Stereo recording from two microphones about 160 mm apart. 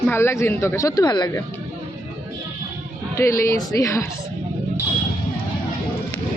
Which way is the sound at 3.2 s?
20° left (ahead or behind).